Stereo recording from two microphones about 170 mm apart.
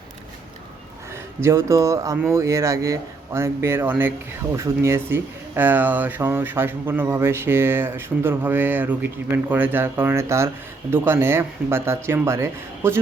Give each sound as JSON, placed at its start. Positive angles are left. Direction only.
{"t": 1.1, "sound": "speech", "side_deg": -15}